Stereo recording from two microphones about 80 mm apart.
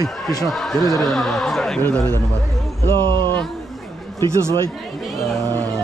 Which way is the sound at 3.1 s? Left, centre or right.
Right.